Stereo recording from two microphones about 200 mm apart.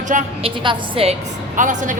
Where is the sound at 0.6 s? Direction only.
25° right (ahead or behind).